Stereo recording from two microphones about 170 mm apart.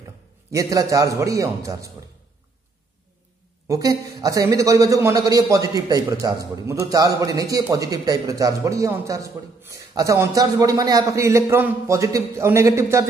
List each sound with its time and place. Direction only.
0.0 s a man's voice: 20° right (ahead or behind)
3.6 s a man's voice: 20° right (ahead or behind)